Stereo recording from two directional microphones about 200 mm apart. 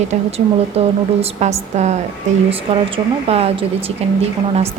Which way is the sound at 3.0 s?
20° right (ahead or behind).